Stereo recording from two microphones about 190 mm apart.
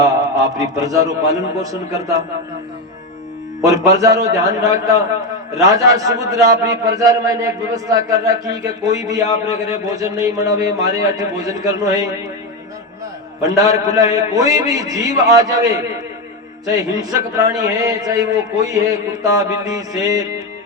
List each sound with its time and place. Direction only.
0.0 s mantra: 20° right (ahead or behind)
1.5 s a man's voice: 20° right (ahead or behind)
3.6 s a man's voice: 20° right (ahead or behind)
13.4 s a man's voice: 20° right (ahead or behind)